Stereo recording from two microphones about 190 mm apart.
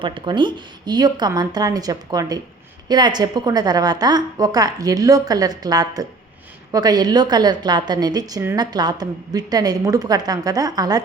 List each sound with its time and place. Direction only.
0.0 s a woman's voice: 25° right (ahead or behind)